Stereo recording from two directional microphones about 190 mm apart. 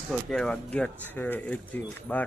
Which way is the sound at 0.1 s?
Centre (ahead or behind).